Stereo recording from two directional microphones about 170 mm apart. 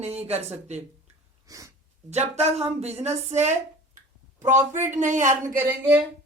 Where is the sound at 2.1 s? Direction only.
40° right (ahead or behind).